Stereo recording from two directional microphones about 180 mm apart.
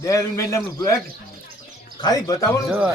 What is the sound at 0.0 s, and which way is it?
Speech, 20° left (ahead or behind).